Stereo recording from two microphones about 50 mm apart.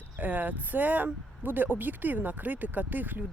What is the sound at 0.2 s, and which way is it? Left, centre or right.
Speech, right.